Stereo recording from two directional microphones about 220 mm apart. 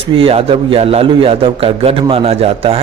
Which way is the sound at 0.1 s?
25° right (ahead or behind).